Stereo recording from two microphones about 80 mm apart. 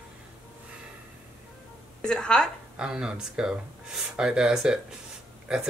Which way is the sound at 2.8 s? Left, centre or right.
Centre.